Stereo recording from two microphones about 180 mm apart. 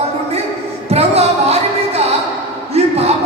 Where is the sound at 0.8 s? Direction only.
35° right (ahead or behind).